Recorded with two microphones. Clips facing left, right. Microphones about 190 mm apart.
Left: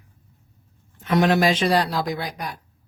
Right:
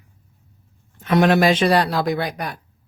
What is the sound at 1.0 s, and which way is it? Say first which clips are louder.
Speech: right 3 dB; 65° right (ahead or behind).